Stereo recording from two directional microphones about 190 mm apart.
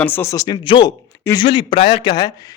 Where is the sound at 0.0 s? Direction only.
10° left (ahead or behind).